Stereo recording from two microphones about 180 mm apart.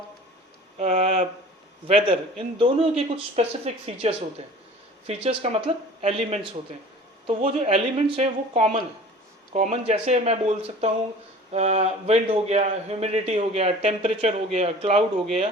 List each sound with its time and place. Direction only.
0.8 s a man's voice: 40° right (ahead or behind)